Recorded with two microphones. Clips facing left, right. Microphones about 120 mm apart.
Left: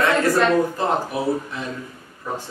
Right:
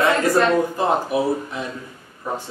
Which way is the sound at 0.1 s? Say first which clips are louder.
Even; centre (ahead or behind).